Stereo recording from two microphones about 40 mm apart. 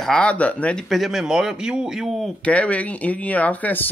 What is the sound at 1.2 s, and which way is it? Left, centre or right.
Speech, centre.